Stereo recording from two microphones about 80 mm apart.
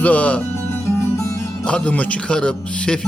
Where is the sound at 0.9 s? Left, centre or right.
Left.